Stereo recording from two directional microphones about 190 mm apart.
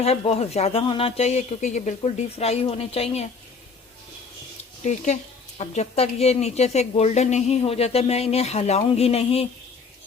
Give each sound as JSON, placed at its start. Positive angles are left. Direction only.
{"t": 0.0, "sound": "speech", "side_deg": 30}
{"t": 4.8, "sound": "speech", "side_deg": 40}